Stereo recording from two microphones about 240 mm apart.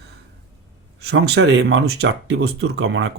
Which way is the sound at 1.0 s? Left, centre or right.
Right.